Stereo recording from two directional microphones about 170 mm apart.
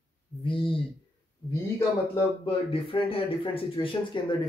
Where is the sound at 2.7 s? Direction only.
30° left (ahead or behind).